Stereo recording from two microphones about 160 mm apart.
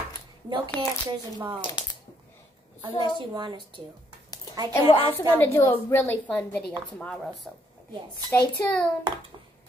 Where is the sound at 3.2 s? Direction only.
30° right (ahead or behind).